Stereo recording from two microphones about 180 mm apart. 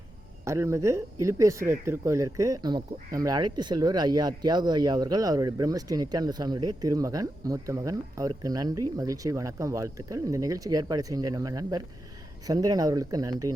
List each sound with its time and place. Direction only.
0.4 s speech: 15° right (ahead or behind)